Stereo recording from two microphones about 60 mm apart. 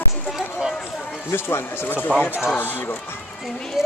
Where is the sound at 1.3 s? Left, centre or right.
Left.